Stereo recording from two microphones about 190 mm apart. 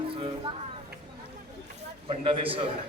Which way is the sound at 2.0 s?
30° right (ahead or behind).